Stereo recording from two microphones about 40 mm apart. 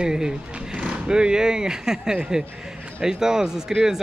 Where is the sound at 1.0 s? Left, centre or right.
Right.